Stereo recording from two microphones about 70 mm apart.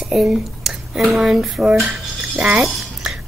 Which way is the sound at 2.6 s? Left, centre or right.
Centre.